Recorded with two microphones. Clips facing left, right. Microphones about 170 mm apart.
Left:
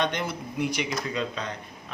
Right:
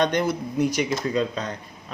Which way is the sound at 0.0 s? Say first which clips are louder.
Right 6 dB; 45° right (ahead or behind).